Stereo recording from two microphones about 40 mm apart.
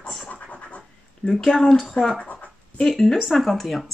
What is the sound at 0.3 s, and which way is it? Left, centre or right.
Scratch, left.